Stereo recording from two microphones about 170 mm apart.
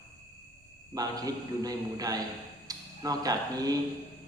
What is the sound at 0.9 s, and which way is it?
A man's voice, 20° right (ahead or behind).